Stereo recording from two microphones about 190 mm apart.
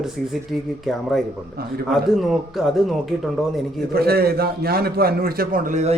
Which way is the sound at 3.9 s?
55° right (ahead or behind).